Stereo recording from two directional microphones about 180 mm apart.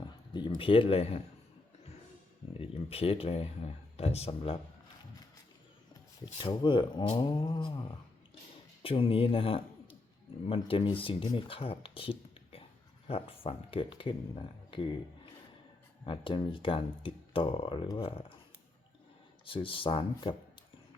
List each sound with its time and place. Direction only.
0.0 s speech: 25° left (ahead or behind)
2.6 s speech: 35° left (ahead or behind)
6.2 s speech: 25° left (ahead or behind)
16.0 s speech: 30° left (ahead or behind)
19.5 s speech: 30° left (ahead or behind)